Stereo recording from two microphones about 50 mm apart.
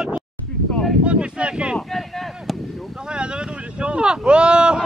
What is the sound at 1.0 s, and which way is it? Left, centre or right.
Wind noise, right.